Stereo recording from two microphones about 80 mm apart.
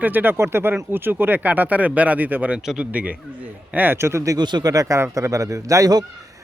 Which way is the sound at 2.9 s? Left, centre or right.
Centre.